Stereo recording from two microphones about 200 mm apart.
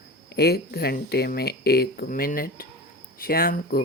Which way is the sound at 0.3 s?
55° left (ahead or behind).